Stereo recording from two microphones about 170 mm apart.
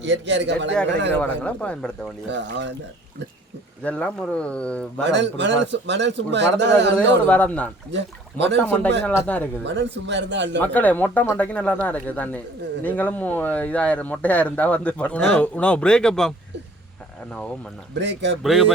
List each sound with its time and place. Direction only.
0.0 s a man's voice: 90° right
1.1 s speech: 10° left (ahead or behind)
2.3 s a man's voice: 90° right
3.8 s speech: 5° left (ahead or behind)
5.0 s a man's voice: 90° right
7.3 s speech: 10° left (ahead or behind)
7.9 s speech: 90° right
9.0 s speech: 10° left (ahead or behind)
9.6 s a man's voice: 90° right
10.6 s speech: 10° left (ahead or behind)
17.9 s a man's voice: 90° right